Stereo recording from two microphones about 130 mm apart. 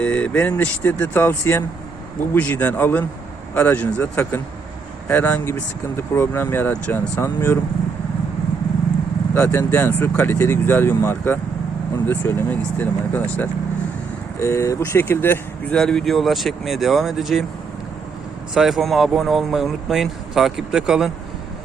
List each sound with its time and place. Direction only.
0.0 s speech: 10° left (ahead or behind)
9.3 s speech: 20° left (ahead or behind)
14.3 s speech: 25° left (ahead or behind)
15.8 s speech: 5° left (ahead or behind)
18.5 s speech: 5° right (ahead or behind)